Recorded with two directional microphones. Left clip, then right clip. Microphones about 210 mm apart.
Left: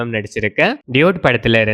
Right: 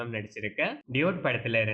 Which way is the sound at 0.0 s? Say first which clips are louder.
Left 15 dB; 45° left (ahead or behind).